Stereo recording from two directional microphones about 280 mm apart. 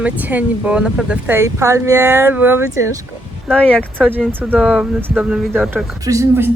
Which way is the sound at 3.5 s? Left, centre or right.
Centre.